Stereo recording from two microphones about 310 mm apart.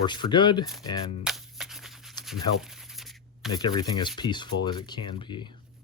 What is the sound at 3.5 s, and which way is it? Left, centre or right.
Speech, centre.